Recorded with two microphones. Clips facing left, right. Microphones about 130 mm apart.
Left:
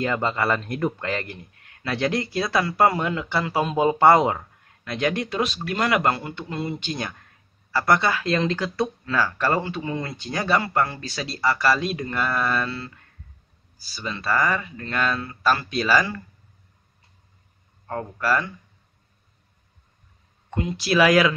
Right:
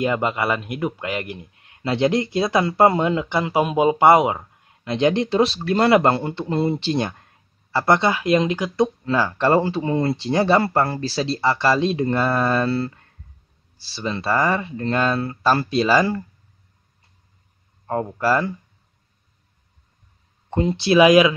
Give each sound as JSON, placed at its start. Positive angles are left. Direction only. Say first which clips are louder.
{"t": 0.0, "sound": "a man's voice", "louder": "right 2 dB", "side_deg": -15}
{"t": 17.8, "sound": "a man's voice", "louder": "right 5 dB", "side_deg": -25}
{"t": 20.4, "sound": "a man's voice", "louder": "right 6 dB", "side_deg": -30}